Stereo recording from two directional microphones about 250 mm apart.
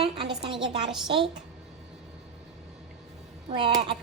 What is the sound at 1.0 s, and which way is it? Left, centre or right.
Speech, right.